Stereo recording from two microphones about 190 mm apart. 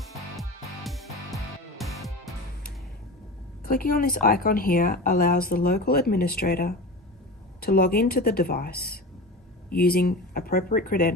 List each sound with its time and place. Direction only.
0.9 s music: centre (ahead or behind)
3.6 s a woman's voice: 50° left (ahead or behind)